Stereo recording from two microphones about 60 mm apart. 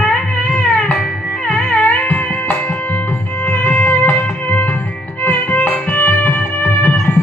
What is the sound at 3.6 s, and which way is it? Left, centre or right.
Music, left.